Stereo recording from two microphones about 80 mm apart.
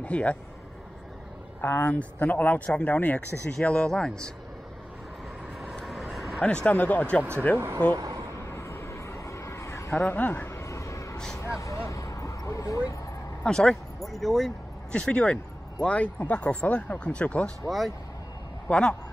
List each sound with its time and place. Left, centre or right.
0.0 s speech: centre
1.6 s speech: centre
5.6 s vehicle: centre
6.4 s speech: centre
7.9 s speech: right
8.5 s vehicle: left
9.9 s a sound: left
11.3 s vehicle: left
13.4 s speech: centre
14.9 s speech: centre
17.6 s speech: centre
18.7 s speech: centre